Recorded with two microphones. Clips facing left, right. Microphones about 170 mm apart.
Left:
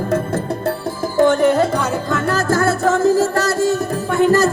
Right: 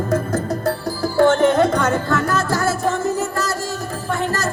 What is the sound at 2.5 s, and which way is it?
Music, 55° left (ahead or behind).